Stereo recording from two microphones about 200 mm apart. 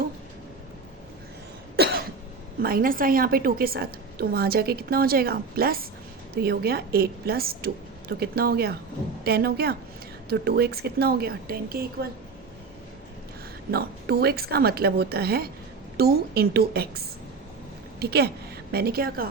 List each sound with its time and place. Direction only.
1.8 s cough: 55° right (ahead or behind)
2.6 s a woman's voice: 50° right (ahead or behind)
13.7 s a woman's voice: 50° right (ahead or behind)
18.0 s a woman's voice: 55° right (ahead or behind)